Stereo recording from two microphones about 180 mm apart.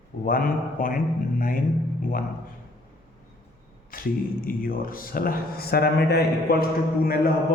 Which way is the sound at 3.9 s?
50° left (ahead or behind).